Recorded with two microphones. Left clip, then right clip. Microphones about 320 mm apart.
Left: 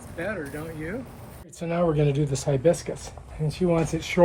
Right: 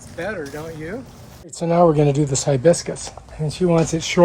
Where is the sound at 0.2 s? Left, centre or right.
Centre.